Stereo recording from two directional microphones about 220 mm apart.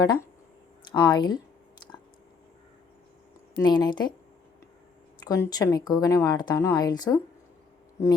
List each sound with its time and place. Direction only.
0.0 s speech: 15° left (ahead or behind)
3.6 s speech: 20° left (ahead or behind)
5.2 s speech: 15° left (ahead or behind)